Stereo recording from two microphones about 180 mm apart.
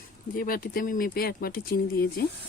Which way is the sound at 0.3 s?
55° left (ahead or behind).